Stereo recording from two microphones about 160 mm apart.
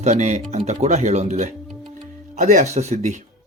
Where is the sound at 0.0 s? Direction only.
45° right (ahead or behind).